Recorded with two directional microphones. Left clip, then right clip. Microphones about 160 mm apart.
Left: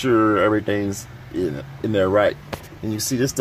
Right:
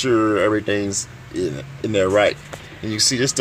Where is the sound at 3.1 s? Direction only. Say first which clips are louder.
Right 2 dB; 35° right (ahead or behind).